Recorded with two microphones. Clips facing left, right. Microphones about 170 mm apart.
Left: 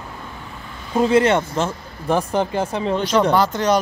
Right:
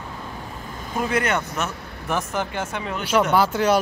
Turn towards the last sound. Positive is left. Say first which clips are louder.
# left 1 dB
turn(degrees=-5)  # may be behind; listen again after turning